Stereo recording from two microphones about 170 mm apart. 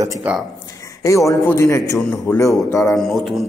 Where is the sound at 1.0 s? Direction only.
20° left (ahead or behind).